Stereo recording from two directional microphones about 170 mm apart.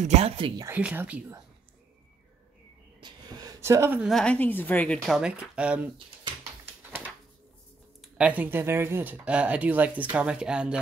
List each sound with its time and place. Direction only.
0.0 s speech: 40° right (ahead or behind)
0.7 s speech: 10° right (ahead or behind)
3.0 s a sound: 25° right (ahead or behind)
4.0 s speech: 5° left (ahead or behind)
6.8 s a sound: 10° right (ahead or behind)
8.0 s speech: 5° right (ahead or behind)